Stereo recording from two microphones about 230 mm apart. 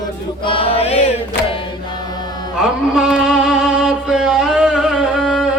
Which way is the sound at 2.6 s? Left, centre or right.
Centre.